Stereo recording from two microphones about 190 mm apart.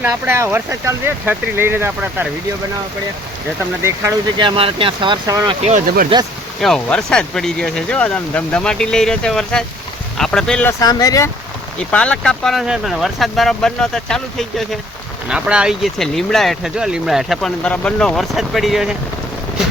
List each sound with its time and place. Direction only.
0.0 s speech: 15° right (ahead or behind)
3.8 s speech: 20° right (ahead or behind)
5.2 s speech: 15° right (ahead or behind)
5.5 s speech: 35° right (ahead or behind)
6.6 s speech: centre (ahead or behind); by 11.3 s 20° left (ahead or behind)
11.9 s speech: 5° left (ahead or behind)